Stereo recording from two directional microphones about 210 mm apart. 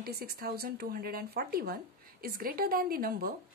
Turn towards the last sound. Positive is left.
turn(degrees=-45)  # may be behind; listen again after turning